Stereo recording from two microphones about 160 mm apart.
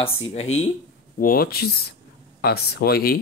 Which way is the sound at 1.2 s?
65° left (ahead or behind).